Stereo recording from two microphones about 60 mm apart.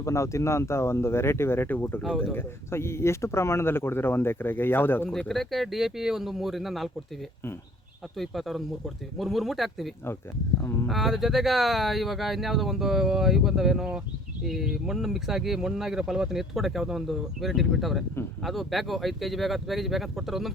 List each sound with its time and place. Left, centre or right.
0.0 s speech: left
2.3 s speech: left
5.3 s speech: centre
8.1 s speech: centre
10.6 s speech: left
10.8 s speech: centre